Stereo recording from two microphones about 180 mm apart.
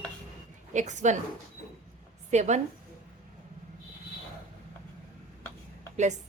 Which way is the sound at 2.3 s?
40° right (ahead or behind).